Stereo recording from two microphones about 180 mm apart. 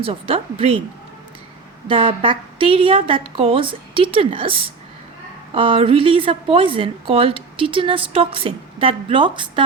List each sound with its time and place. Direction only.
0.0 s a woman's voice: 30° right (ahead or behind)
1.9 s a woman's voice: 30° right (ahead or behind)